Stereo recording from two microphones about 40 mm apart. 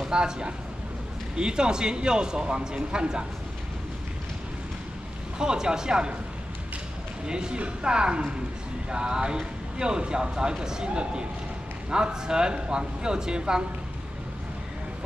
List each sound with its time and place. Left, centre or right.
0.0 s a man's voice: right
5.4 s a man's voice: centre
7.2 s a man's voice: right